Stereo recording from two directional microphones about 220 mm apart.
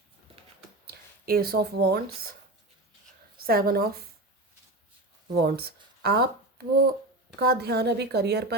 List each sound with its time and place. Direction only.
0.9 s speech: 45° right (ahead or behind)
3.3 s a woman's voice: 40° right (ahead or behind)
5.3 s a woman's voice: 45° right (ahead or behind)